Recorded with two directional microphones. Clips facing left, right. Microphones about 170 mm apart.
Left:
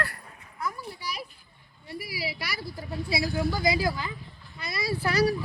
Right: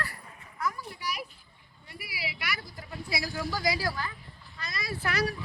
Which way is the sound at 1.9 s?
40° left (ahead or behind).